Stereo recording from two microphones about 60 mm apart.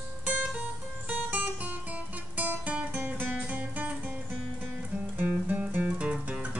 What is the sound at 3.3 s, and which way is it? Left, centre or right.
Music, right.